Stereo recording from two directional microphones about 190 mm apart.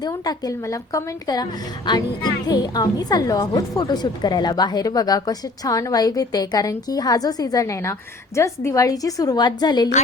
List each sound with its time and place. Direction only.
0.0 s a woman's voice: 20° left (ahead or behind)